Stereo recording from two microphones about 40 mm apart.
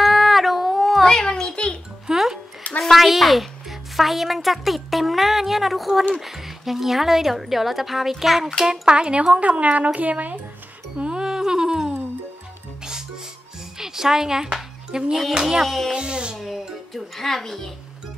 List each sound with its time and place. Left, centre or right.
0.0 s cat: centre
1.0 s a sound: centre
2.0 s music: centre
2.8 s a woman's voice: centre
8.6 s speech: right
11.0 s music: right
13.7 s a sound: centre
15.6 s a woman's voice: centre
15.9 s speech: right
16.3 s music: centre